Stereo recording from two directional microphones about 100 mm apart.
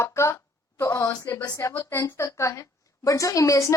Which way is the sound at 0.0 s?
30° left (ahead or behind).